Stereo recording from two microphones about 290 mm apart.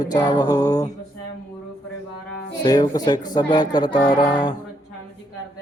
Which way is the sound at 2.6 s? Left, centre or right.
Centre.